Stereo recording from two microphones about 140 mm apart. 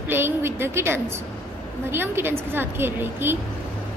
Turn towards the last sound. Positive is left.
turn(degrees=-15)  # may be behind; listen again after turning